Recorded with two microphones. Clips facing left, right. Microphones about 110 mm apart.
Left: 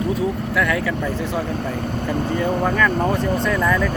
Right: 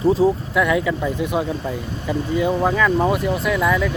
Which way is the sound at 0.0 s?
30° right (ahead or behind).